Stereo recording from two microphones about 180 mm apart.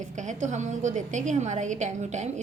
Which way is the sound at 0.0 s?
40° right (ahead or behind).